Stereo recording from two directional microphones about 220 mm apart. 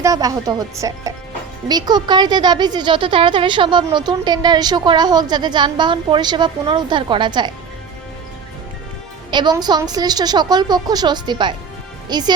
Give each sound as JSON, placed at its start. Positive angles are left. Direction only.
{"t": 0.0, "sound": "speech", "side_deg": -15}
{"t": 9.3, "sound": "speech", "side_deg": -20}